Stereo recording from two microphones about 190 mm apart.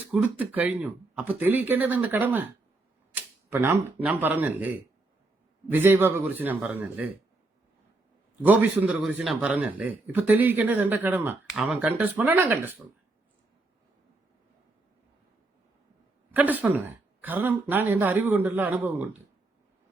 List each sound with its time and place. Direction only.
0.1 s a man's voice: 5° right (ahead or behind)
8.4 s a man's voice: 10° right (ahead or behind)
16.3 s a man's voice: 10° right (ahead or behind)